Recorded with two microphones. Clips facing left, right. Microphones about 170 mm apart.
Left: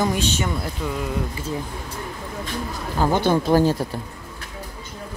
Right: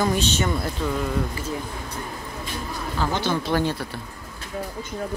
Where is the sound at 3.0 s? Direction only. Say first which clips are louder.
Left 6 dB; 45° left (ahead or behind).